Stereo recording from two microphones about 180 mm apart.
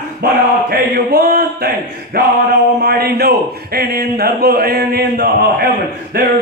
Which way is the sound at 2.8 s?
60° right (ahead or behind).